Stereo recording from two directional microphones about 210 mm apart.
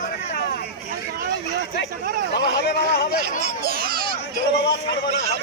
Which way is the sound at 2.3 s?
55° left (ahead or behind).